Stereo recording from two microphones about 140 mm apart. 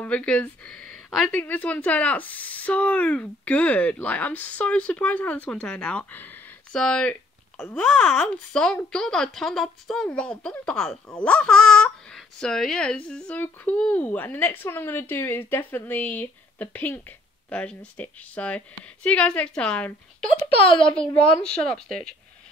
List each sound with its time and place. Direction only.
0.0 s speech: 10° left (ahead or behind)
20.5 s speech: 40° left (ahead or behind)
20.9 s a woman's voice: 5° left (ahead or behind)